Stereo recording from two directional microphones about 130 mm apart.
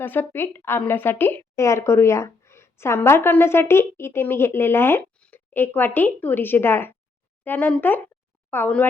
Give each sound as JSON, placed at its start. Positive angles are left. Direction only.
{"t": 0.0, "sound": "a woman's voice", "side_deg": 15}